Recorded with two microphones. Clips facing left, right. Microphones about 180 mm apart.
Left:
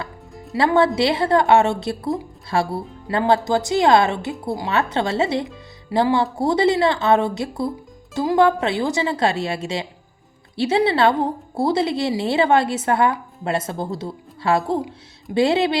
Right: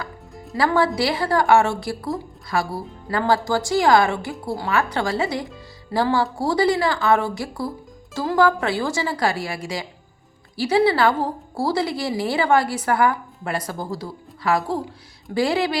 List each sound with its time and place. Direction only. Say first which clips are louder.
0.5 s a woman's voice: left 3 dB; 25° left (ahead or behind)